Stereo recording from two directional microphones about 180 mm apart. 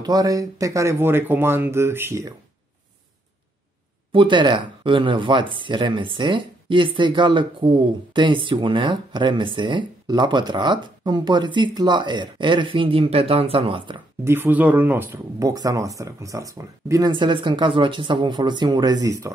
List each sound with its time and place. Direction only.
0.0 s speech: 20° right (ahead or behind)
4.1 s speech: 25° right (ahead or behind)
14.2 s speech: 15° right (ahead or behind)